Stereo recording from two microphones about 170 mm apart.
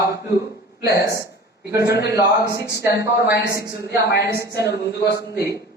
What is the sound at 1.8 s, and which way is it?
A woman's voice, 75° left (ahead or behind).